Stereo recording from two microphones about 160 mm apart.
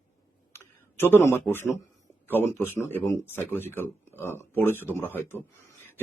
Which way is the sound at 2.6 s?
15° left (ahead or behind).